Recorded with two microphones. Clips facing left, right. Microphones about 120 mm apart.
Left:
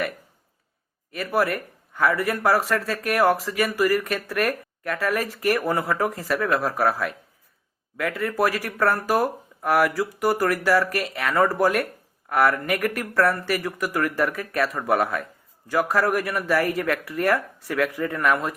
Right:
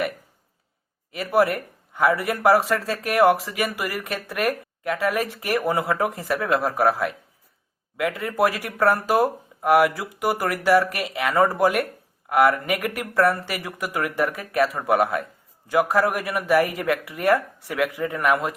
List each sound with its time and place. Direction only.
1.1 s speech: 25° right (ahead or behind)